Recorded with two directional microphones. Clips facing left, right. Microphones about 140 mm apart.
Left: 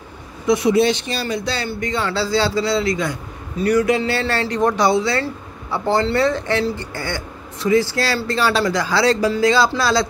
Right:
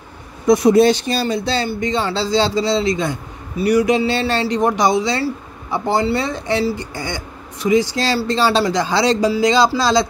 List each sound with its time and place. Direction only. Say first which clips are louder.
0.5 s speech: right 4 dB; 40° right (ahead or behind); by 3.2 s 25° right (ahead or behind)
3.5 s speech: right 2 dB; 15° right (ahead or behind)